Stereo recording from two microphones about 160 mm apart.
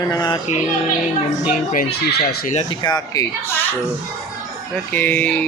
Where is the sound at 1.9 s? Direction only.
90° left.